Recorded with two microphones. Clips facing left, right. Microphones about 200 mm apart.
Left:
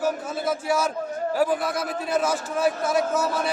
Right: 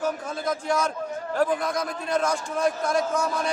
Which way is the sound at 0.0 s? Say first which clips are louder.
Left 2 dB; 5° left (ahead or behind).